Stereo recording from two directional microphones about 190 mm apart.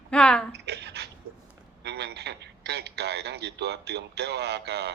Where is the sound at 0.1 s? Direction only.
5° left (ahead or behind).